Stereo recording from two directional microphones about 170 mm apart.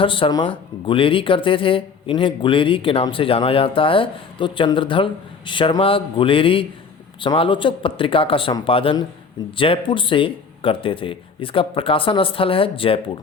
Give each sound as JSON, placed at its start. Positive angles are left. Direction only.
{"t": 0.0, "sound": "speech", "side_deg": 30}